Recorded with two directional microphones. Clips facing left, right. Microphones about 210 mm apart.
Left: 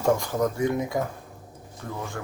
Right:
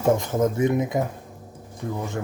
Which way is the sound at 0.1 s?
20° right (ahead or behind).